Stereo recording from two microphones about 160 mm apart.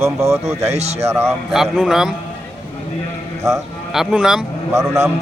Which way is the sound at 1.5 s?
Centre (ahead or behind).